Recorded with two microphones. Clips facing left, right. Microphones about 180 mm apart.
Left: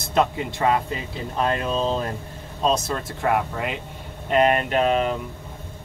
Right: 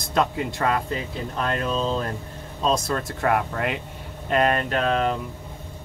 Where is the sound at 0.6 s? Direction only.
15° left (ahead or behind).